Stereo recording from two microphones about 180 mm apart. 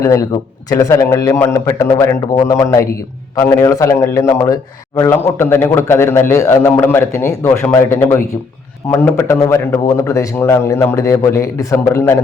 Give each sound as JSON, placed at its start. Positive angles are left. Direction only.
{"t": 0.0, "sound": "a man's voice", "side_deg": 20}